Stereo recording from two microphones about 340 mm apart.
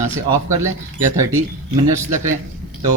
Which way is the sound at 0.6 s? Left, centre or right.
Centre.